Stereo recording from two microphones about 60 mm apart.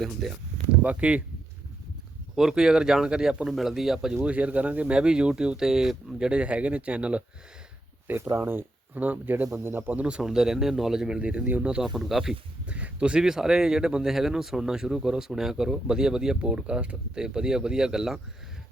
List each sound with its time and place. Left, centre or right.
0.0 s speech: centre
0.7 s speech: right
2.3 s speech: centre
4.3 s speech: right
8.0 s speech: right; by 10.2 s centre
10.2 s speech: centre; by 11.8 s right
11.8 s speech: centre
12.3 s speech: right